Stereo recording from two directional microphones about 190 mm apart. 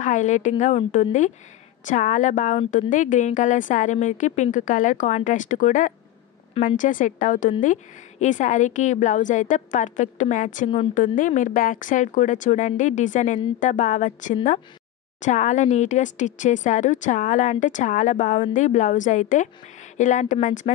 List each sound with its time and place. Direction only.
0.0 s speech: 40° left (ahead or behind)